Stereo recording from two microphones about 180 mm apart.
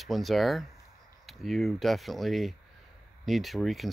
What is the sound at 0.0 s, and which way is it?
Speech, centre (ahead or behind).